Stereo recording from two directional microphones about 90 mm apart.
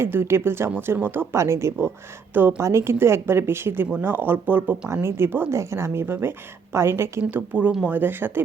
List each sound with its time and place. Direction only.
0.0 s speech: 25° right (ahead or behind)